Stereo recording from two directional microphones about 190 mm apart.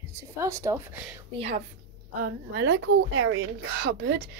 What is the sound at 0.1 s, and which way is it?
Speech, 15° right (ahead or behind).